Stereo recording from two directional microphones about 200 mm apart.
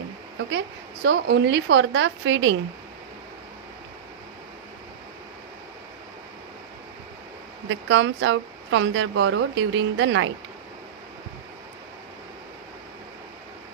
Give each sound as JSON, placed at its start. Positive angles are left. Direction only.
{"t": 1.0, "sound": "a woman's voice", "side_deg": -60}
{"t": 7.7, "sound": "a woman's voice", "side_deg": -65}